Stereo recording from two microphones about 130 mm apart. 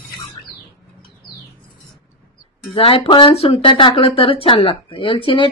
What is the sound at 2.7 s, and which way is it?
Speech, 45° left (ahead or behind).